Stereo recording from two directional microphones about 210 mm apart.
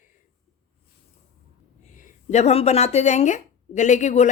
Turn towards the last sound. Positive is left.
turn(degrees=35)  # may be behind; listen again after turning